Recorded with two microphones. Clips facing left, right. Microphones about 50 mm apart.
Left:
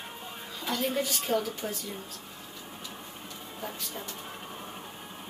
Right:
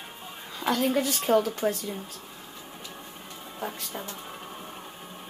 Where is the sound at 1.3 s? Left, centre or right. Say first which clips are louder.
Right 7 dB; right.